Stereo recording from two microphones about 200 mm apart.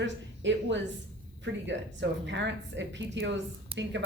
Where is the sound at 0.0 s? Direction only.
65° right (ahead or behind).